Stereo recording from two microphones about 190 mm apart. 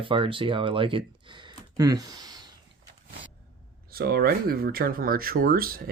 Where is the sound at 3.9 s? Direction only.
55° right (ahead or behind).